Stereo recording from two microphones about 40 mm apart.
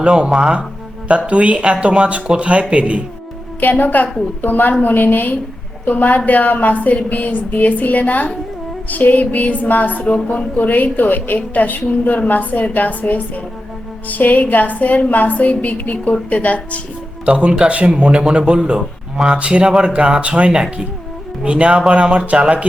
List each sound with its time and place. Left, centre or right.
0.0 s speech: right
1.3 s speech: right
3.6 s a woman's voice: left
17.2 s speech: right